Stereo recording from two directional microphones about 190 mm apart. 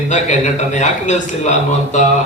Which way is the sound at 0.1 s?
40° left (ahead or behind).